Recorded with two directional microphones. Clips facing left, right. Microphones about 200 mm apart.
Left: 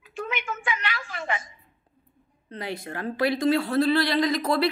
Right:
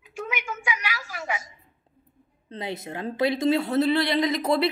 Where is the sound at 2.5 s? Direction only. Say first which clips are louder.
Right 1 dB; 20° right (ahead or behind).